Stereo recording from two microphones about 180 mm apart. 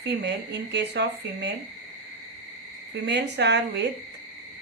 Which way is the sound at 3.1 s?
70° right (ahead or behind).